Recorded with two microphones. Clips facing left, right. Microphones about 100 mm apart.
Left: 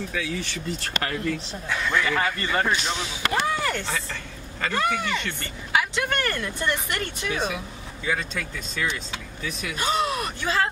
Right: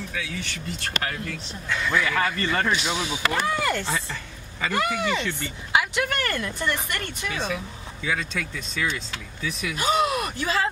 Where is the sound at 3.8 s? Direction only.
15° right (ahead or behind).